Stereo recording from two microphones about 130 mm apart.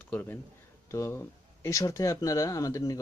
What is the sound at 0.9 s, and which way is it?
Speech, 25° left (ahead or behind).